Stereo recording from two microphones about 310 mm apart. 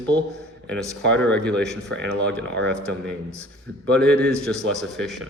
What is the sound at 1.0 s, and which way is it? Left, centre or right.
A man's voice, centre.